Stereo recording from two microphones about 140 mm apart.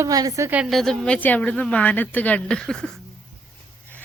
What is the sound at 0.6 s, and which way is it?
A woman's voice, centre (ahead or behind).